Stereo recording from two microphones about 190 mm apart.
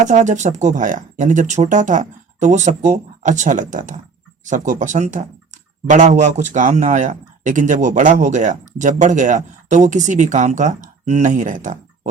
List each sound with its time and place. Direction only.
0.0 s speech: 40° right (ahead or behind)